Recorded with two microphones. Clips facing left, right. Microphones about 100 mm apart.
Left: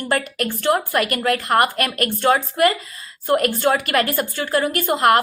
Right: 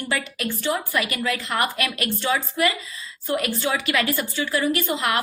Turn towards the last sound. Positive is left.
turn(degrees=50)  # may be behind; listen again after turning